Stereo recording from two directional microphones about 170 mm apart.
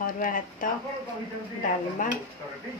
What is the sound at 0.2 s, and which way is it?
Speech, 55° left (ahead or behind).